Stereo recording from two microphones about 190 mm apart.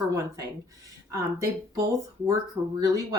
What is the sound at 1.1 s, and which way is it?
Speech, 15° right (ahead or behind).